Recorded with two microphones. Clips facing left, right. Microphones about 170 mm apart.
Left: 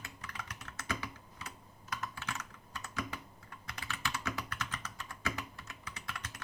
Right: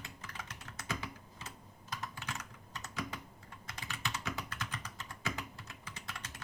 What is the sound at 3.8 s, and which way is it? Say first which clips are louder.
Computer keyboard: left 2 dB; 20° right (ahead or behind).